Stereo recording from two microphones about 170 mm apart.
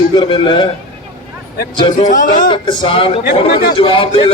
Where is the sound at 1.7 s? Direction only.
30° left (ahead or behind).